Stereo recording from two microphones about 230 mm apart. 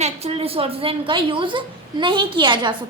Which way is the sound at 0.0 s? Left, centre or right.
Right.